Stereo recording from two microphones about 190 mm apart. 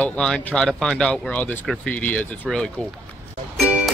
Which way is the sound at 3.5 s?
5° right (ahead or behind).